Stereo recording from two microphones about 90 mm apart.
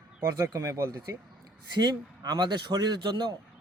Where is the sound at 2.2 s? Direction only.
50° right (ahead or behind).